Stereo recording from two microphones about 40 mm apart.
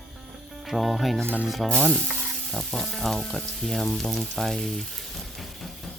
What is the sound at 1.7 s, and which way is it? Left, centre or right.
Stir, centre.